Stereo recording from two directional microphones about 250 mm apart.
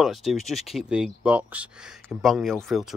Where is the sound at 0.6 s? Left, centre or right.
Left.